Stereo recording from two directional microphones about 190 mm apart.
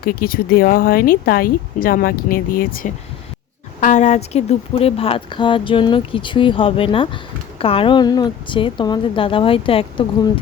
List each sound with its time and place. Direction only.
0.0 s speech: 50° left (ahead or behind); by 10.1 s 30° left (ahead or behind)